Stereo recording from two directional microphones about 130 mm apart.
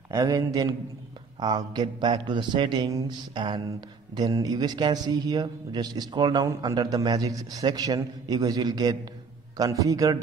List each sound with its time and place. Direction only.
0.1 s a man's voice: 25° right (ahead or behind)